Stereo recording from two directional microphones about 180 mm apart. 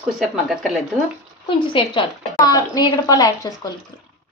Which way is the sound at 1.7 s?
25° left (ahead or behind).